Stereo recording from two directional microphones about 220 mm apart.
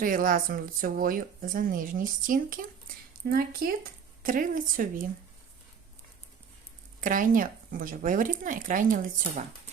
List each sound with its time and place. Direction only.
0.0 s speech: 40° right (ahead or behind)
4.2 s speech: 40° right (ahead or behind)
7.0 s speech: 40° right (ahead or behind)